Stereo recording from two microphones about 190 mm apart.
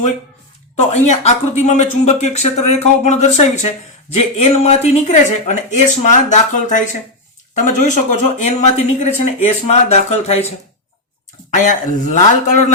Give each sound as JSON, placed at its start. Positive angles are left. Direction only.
{"t": 0.8, "sound": "speech", "side_deg": 35}
{"t": 11.5, "sound": "speech", "side_deg": 40}